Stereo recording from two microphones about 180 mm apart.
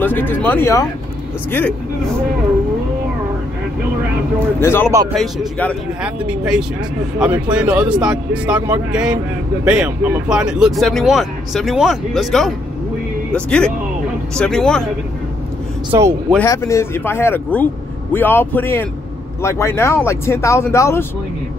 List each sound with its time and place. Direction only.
0.0 s speech: 10° left (ahead or behind)
4.6 s speech: 15° left (ahead or behind)
5.1 s speech: centre (ahead or behind)
15.9 s speech: 15° right (ahead or behind)
16.4 s speech: 15° left (ahead or behind)